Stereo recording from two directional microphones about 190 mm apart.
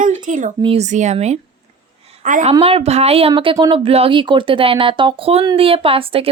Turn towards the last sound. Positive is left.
turn(degrees=-30)  # may be behind; listen again after turning